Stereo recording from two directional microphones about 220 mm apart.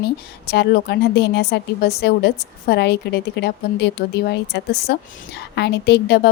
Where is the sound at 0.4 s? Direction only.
50° left (ahead or behind).